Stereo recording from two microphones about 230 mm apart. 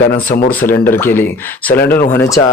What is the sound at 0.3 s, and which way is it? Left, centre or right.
Speech, left.